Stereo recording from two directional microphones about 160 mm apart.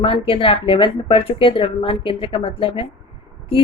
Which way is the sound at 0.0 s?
35° left (ahead or behind).